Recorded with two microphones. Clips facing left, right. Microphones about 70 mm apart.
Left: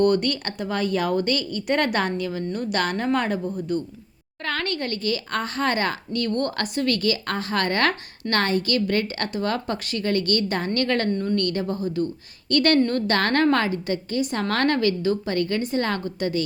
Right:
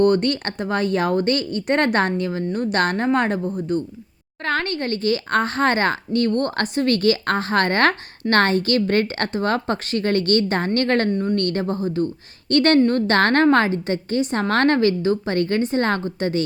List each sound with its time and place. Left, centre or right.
0.0 s a woman's voice: right